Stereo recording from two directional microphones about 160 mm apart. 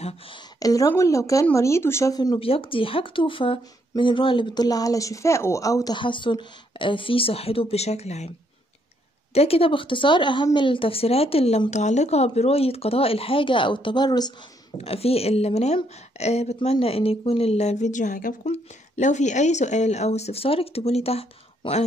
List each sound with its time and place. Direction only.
0.6 s speech: 20° left (ahead or behind); by 8.3 s 45° left (ahead or behind)
9.3 s speech: 40° left (ahead or behind)
14.8 s speech: 40° left (ahead or behind)